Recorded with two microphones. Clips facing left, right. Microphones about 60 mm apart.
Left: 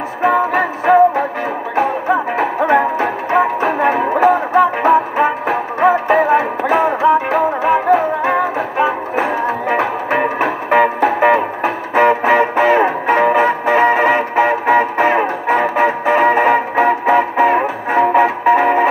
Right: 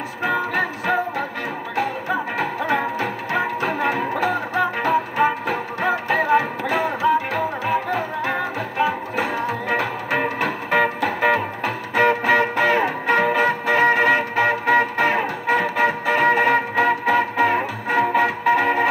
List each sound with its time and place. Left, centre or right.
0.2 s music: left